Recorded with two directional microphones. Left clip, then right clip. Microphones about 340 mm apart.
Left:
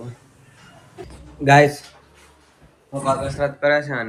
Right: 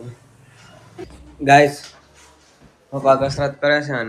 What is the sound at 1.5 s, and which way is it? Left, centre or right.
Speech, centre.